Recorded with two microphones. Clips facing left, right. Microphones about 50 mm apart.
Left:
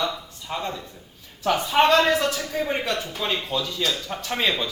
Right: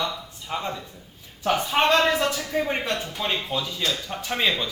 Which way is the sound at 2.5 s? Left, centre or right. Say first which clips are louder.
Even; centre.